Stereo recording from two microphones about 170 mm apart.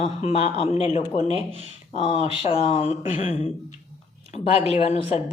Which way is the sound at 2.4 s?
35° left (ahead or behind).